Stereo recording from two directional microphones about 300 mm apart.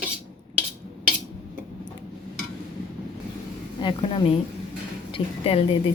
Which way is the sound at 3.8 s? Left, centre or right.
Centre.